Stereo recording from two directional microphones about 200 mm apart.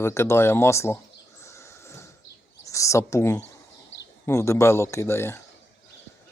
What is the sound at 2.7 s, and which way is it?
Speech, 15° left (ahead or behind).